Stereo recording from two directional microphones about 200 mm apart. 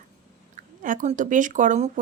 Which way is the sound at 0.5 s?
40° right (ahead or behind).